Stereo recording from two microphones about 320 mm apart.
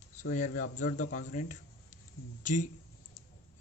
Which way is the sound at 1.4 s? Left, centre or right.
Left.